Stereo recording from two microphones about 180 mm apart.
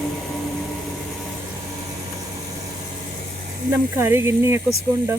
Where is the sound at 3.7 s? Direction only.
15° right (ahead or behind).